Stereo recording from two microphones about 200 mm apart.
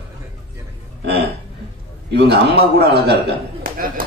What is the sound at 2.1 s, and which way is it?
Speech, 55° right (ahead or behind).